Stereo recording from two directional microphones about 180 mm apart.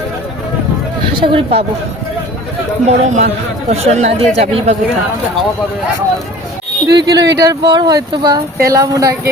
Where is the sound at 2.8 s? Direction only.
40° right (ahead or behind).